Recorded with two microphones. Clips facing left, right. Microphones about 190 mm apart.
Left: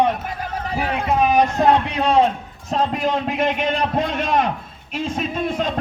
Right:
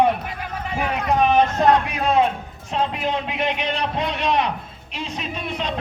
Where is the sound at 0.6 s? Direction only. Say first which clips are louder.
Left 1 dB; 35° left (ahead or behind).